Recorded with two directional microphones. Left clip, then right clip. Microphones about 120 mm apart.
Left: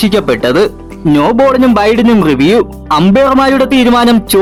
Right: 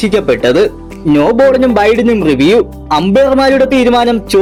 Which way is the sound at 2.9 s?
30° left (ahead or behind).